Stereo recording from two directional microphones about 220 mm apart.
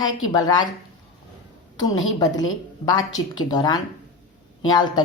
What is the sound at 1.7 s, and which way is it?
A woman's voice, 15° left (ahead or behind).